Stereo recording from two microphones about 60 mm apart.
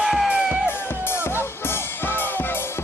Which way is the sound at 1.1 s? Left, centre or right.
Left.